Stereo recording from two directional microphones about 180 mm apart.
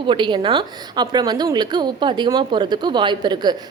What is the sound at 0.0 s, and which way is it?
A woman's voice, 25° right (ahead or behind).